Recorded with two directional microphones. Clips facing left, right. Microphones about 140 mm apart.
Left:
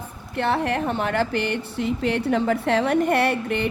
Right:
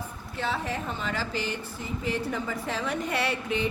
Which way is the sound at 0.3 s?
65° left (ahead or behind).